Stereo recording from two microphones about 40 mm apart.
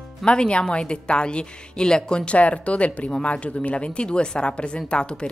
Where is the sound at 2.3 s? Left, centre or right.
Left.